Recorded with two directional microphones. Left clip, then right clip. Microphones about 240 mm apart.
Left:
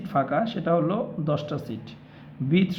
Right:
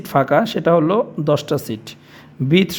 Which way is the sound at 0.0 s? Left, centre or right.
Right.